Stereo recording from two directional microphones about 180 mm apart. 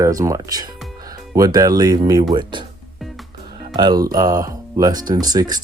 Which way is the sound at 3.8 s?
20° right (ahead or behind).